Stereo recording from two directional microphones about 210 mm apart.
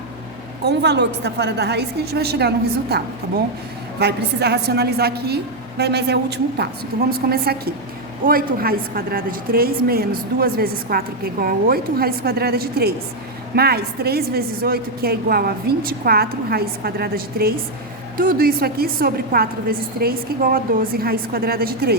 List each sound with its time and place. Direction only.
0.6 s a woman's voice: 55° right (ahead or behind)